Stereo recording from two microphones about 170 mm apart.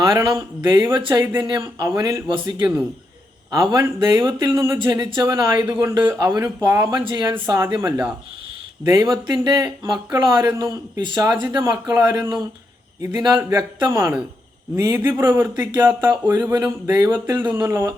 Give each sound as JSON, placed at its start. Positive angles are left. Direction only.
{"t": 0.0, "sound": "speech", "side_deg": -25}
{"t": 3.5, "sound": "speech", "side_deg": -20}
{"t": 6.7, "sound": "speech", "side_deg": -25}